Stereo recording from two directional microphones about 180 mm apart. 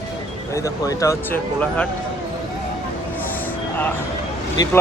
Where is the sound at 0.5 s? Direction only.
20° left (ahead or behind).